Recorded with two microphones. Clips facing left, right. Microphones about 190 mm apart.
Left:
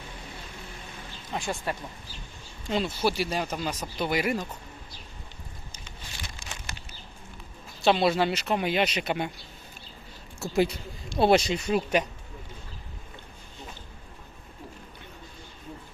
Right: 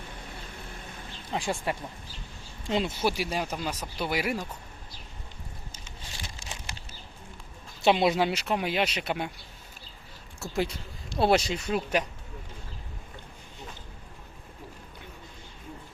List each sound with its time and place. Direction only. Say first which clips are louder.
1.3 s speech: right 1 dB; 25° right (ahead or behind); by 4.4 s 5° right (ahead or behind)
6.4 s a sound: even; 30° right (ahead or behind)
7.9 s speech: even; 15° right (ahead or behind)
10.4 s speech: left 5 dB; 5° left (ahead or behind)